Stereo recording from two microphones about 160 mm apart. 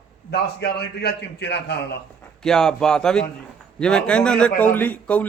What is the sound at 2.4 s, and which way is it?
A man's voice, 5° left (ahead or behind).